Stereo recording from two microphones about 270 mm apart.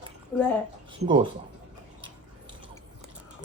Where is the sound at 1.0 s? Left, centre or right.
Centre.